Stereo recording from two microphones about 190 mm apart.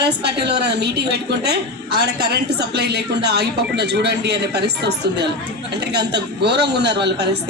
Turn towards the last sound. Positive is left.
turn(degrees=-65)  # may be behind; listen again after turning